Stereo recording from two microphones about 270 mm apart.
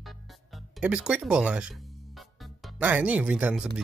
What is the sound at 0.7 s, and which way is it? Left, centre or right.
Speech, centre.